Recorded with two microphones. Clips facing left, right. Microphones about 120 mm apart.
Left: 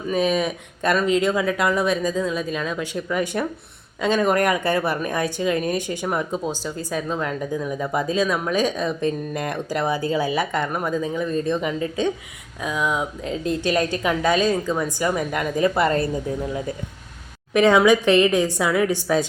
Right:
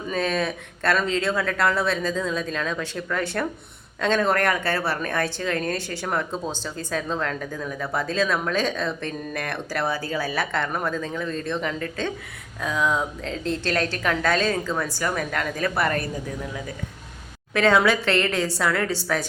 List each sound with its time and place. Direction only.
0.1 s speech: 15° left (ahead or behind)
17.5 s speech: 15° left (ahead or behind)